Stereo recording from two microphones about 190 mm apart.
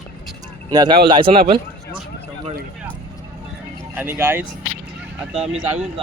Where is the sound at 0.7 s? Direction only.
20° right (ahead or behind).